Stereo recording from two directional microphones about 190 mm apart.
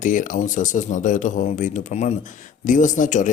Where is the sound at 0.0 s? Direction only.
40° left (ahead or behind).